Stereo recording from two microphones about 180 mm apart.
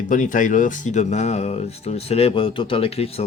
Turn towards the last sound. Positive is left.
turn(degrees=35)  # may be behind; listen again after turning